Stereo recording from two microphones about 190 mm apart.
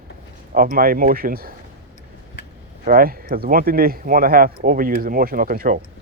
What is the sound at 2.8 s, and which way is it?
Speech, 50° right (ahead or behind).